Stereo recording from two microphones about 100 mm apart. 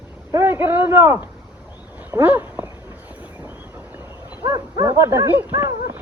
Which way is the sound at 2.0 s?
20° right (ahead or behind).